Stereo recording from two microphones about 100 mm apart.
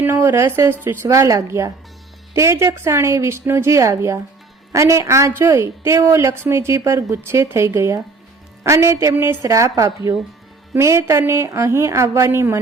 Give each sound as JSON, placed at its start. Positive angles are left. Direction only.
{"t": 0.0, "sound": "a woman's voice", "side_deg": -25}